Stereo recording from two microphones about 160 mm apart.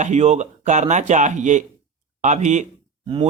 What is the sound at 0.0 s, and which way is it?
Speech, 45° right (ahead or behind).